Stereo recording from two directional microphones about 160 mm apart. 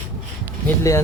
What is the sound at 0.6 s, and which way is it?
Speech, 20° left (ahead or behind).